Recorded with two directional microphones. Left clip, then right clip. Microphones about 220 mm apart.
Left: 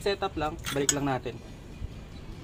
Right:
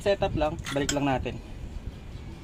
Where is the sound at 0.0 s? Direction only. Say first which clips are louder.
Right 4 dB; 25° right (ahead or behind).